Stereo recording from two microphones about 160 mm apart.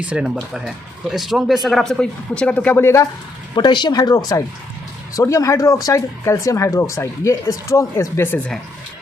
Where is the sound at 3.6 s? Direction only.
30° left (ahead or behind); by 8.6 s 10° left (ahead or behind).